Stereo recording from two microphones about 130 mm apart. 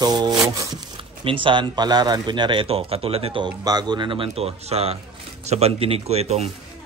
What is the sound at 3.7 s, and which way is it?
Speech, 35° right (ahead or behind).